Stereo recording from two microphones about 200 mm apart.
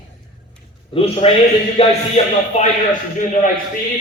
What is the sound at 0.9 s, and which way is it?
A man's voice, 30° left (ahead or behind).